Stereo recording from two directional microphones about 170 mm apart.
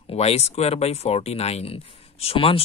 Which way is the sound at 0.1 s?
35° left (ahead or behind).